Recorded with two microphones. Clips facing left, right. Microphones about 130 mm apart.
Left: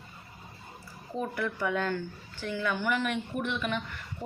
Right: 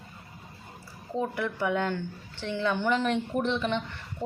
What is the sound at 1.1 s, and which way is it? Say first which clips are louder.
Speech: right 2 dB; 20° right (ahead or behind).